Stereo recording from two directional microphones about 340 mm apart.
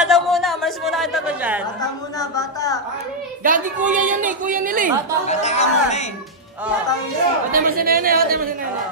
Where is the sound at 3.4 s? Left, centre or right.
Right.